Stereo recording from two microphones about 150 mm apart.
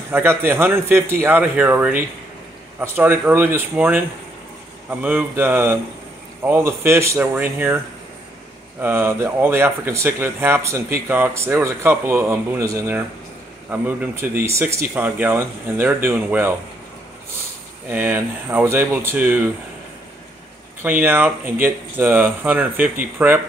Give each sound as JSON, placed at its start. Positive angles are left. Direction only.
{"t": 0.1, "sound": "speech", "side_deg": -15}
{"t": 5.0, "sound": "speech", "side_deg": -15}
{"t": 8.8, "sound": "speech", "side_deg": -15}
{"t": 17.8, "sound": "speech", "side_deg": -15}
{"t": 20.8, "sound": "speech", "side_deg": -10}